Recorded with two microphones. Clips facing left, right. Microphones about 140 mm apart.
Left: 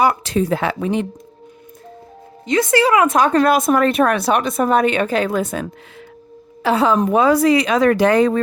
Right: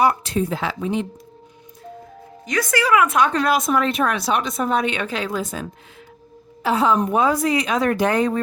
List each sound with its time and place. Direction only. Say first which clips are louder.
0.0 s speech: left 2 dB; 90° left; by 1.0 s 65° left (ahead or behind)
2.5 s speech: left 5 dB; 25° left (ahead or behind); by 5.6 s 60° left (ahead or behind)
6.6 s a woman's voice: left 3 dB; 85° left